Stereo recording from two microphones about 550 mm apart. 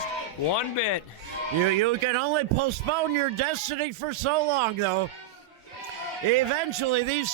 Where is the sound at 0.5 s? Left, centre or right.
Left.